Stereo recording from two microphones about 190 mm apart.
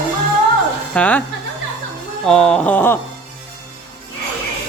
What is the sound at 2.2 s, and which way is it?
Speech, 5° left (ahead or behind).